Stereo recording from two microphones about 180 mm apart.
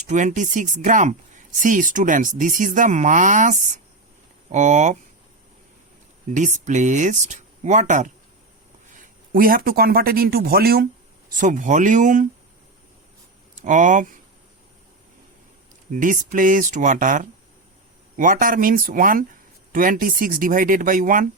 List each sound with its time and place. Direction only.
0.1 s speech: 45° right (ahead or behind)
6.2 s speech: 45° right (ahead or behind); by 10.8 s 60° right (ahead or behind)
11.3 s speech: 45° right (ahead or behind)
13.6 s speech: 45° right (ahead or behind)
15.9 s speech: 45° right (ahead or behind)